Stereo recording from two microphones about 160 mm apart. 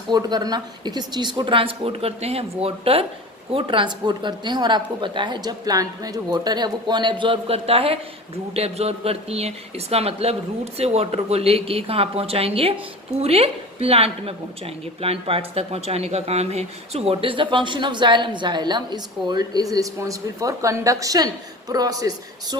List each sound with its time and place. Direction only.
0.1 s speech: 25° right (ahead or behind)